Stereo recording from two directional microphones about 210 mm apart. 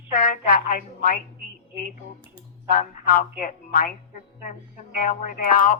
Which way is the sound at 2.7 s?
40° left (ahead or behind).